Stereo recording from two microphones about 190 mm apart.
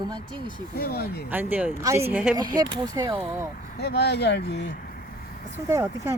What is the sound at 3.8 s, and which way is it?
Speech, 60° left (ahead or behind).